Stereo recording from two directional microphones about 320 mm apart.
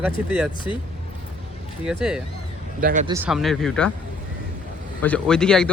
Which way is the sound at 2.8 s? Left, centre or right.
Right.